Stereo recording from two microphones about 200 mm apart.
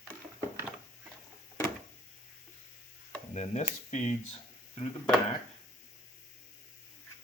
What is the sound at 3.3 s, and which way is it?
Speech, 35° left (ahead or behind).